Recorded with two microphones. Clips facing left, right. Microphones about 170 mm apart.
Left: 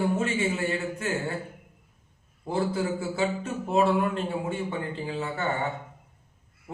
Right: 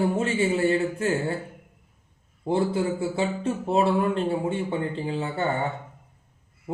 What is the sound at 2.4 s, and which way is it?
Speech, 30° right (ahead or behind).